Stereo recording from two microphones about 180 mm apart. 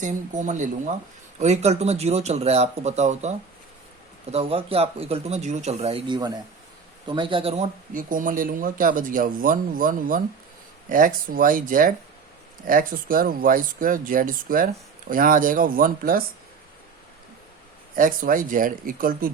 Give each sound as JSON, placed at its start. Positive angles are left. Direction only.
{"t": 0.0, "sound": "speech", "side_deg": -45}
{"t": 17.9, "sound": "speech", "side_deg": -50}